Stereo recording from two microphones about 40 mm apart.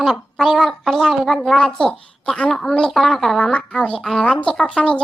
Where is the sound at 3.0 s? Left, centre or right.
Centre.